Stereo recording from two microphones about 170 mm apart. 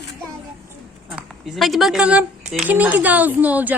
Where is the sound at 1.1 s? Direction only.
Centre (ahead or behind).